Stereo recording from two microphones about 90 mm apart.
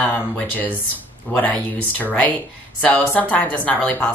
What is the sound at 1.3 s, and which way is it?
A woman's voice, 20° left (ahead or behind).